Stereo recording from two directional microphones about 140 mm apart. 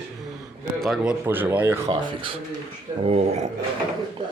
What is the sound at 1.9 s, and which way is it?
Speech, 35° right (ahead or behind).